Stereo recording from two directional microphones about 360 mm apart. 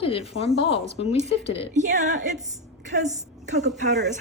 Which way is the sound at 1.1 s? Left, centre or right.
Centre.